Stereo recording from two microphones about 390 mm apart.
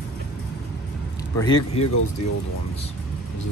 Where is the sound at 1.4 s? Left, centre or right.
Centre.